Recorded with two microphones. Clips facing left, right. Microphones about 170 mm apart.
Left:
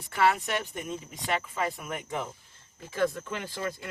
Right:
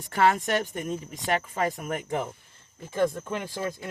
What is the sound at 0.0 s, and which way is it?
Speech, 45° right (ahead or behind).